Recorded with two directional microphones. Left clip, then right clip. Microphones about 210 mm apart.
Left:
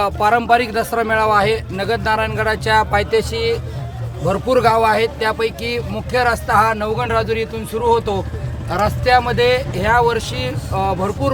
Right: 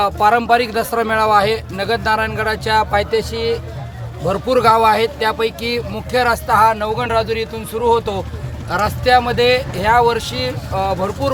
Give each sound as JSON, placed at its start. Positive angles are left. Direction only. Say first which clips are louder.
{"t": 0.0, "sound": "speech", "louder": "right 2 dB", "side_deg": 5}